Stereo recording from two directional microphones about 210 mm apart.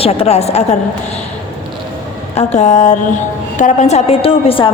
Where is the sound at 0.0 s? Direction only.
30° left (ahead or behind).